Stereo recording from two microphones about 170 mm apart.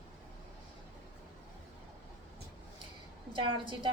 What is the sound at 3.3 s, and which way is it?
Speech, 30° right (ahead or behind).